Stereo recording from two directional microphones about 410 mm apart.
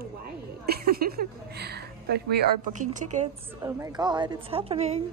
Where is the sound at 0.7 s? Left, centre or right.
Right.